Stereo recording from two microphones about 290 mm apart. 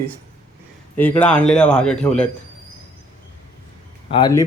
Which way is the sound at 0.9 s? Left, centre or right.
Centre.